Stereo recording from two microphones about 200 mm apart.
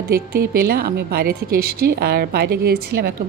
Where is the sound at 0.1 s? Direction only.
50° right (ahead or behind).